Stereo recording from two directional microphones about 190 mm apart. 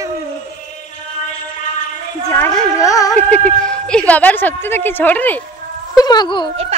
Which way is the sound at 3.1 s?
5° left (ahead or behind).